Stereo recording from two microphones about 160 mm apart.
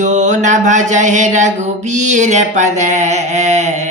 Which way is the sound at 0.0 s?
50° right (ahead or behind).